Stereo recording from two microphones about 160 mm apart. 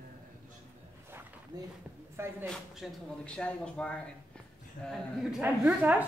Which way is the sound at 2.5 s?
5° left (ahead or behind).